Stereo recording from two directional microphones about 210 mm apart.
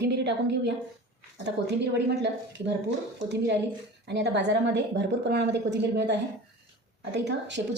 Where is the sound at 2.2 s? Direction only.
55° right (ahead or behind).